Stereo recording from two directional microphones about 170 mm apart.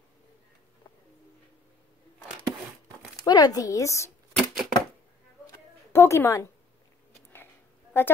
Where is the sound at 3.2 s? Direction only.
25° left (ahead or behind).